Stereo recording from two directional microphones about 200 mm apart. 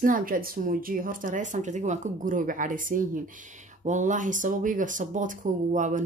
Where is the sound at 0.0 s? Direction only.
45° right (ahead or behind).